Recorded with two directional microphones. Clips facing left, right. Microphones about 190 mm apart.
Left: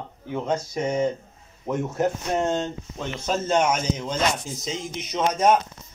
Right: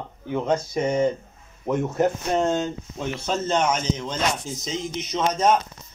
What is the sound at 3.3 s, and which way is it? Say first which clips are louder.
Speech: left 1 dB; 10° left (ahead or behind).